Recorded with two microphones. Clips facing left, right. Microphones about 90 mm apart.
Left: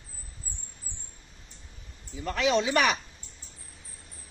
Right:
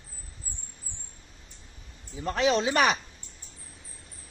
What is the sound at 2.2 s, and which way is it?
Speech, 35° right (ahead or behind).